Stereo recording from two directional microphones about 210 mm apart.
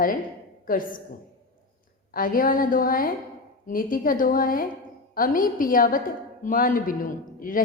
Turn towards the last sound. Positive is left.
turn(degrees=40)  # may be behind; listen again after turning